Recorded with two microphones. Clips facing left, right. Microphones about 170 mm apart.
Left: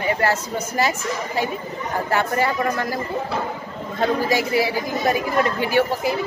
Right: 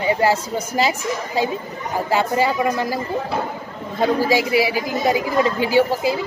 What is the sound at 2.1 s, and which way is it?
Speech, 15° right (ahead or behind).